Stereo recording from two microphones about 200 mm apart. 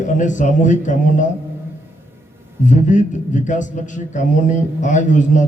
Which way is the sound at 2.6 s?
40° left (ahead or behind).